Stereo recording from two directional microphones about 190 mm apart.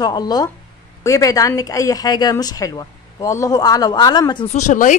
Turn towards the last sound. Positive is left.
turn(degrees=40)  # may be behind; listen again after turning